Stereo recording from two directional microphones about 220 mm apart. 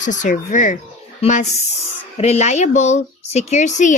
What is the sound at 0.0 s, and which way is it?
A woman's voice, 35° left (ahead or behind).